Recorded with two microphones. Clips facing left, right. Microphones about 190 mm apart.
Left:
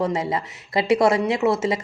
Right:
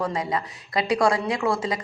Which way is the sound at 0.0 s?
25° left (ahead or behind).